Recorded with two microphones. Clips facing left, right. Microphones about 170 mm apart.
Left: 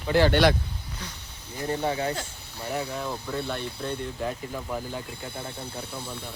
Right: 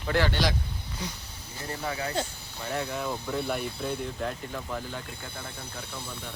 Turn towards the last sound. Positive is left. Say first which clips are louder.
# left 2 dB
turn(degrees=10)  # may be behind; listen again after turning